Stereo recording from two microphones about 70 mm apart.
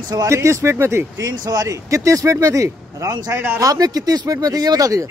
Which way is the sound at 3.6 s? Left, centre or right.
Right.